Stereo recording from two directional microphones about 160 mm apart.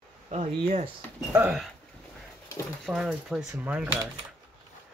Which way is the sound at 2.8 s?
Centre (ahead or behind).